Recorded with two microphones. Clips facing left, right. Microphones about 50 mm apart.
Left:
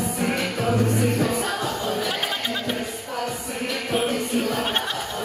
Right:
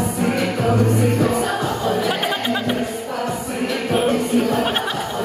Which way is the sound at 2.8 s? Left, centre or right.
Right.